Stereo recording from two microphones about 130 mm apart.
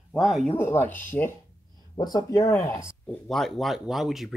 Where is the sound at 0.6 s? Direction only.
15° left (ahead or behind).